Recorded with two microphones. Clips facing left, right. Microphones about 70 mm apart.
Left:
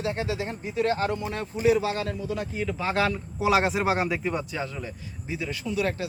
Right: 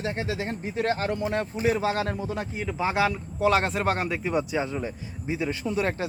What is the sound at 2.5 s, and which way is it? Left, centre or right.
Speech, centre.